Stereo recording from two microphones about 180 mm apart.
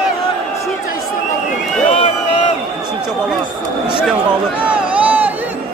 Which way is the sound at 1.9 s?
35° left (ahead or behind).